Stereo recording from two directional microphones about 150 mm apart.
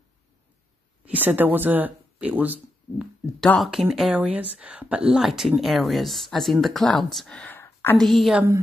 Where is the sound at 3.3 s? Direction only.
Centre (ahead or behind).